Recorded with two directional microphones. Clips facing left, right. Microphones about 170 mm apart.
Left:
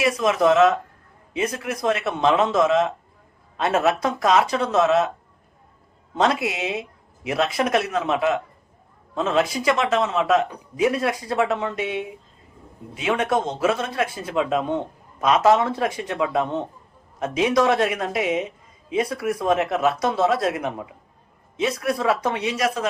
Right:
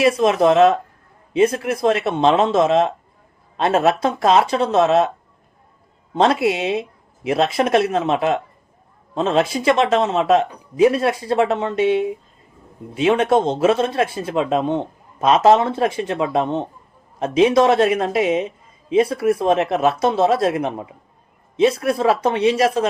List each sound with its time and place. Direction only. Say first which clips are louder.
0.0 s a man's voice: right 4 dB; 30° right (ahead or behind)
6.1 s a man's voice: right 5 dB; 30° right (ahead or behind)